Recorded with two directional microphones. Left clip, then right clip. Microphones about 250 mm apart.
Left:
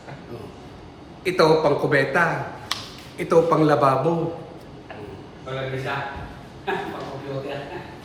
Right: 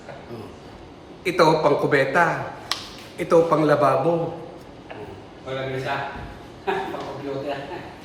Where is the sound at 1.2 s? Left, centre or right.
Centre.